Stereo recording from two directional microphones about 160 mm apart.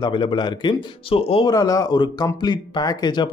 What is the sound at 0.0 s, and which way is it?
Speech, 30° left (ahead or behind).